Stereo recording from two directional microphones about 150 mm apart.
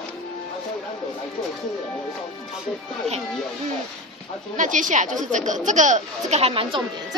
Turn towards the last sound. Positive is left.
turn(degrees=-40)  # may be behind; listen again after turning